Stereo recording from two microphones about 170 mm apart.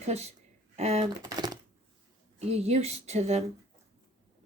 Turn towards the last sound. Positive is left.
turn(degrees=-40)  # may be behind; listen again after turning